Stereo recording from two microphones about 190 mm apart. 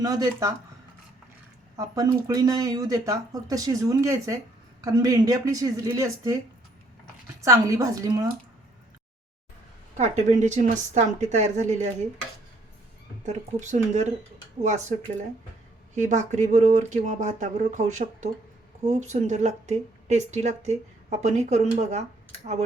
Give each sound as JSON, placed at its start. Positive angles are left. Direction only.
{"t": 0.0, "sound": "speech", "side_deg": -20}
{"t": 1.7, "sound": "speech", "side_deg": -15}
{"t": 7.4, "sound": "speech", "side_deg": -15}
{"t": 10.0, "sound": "a woman's voice", "side_deg": -35}
{"t": 13.2, "sound": "a woman's voice", "side_deg": -40}
{"t": 16.0, "sound": "a woman's voice", "side_deg": -40}